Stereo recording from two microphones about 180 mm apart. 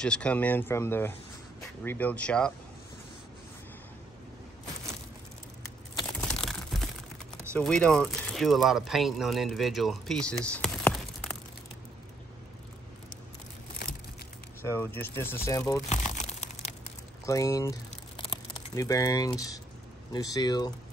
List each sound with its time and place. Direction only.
0.0 s speech: 5° left (ahead or behind)
6.2 s typing: centre (ahead or behind)
7.5 s speech: 5° left (ahead or behind)
14.8 s speech: 10° left (ahead or behind)
15.9 s crumpling: 40° left (ahead or behind)
17.3 s speech: 20° left (ahead or behind)